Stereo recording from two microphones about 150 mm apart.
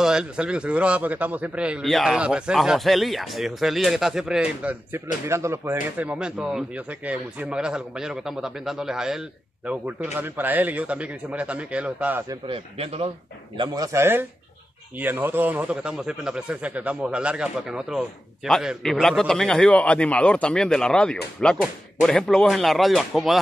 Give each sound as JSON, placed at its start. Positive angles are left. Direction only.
{"t": 0.0, "sound": "a man's voice", "side_deg": -5}
{"t": 12.4, "sound": "speech", "side_deg": -40}
{"t": 13.6, "sound": "a man's voice", "side_deg": -20}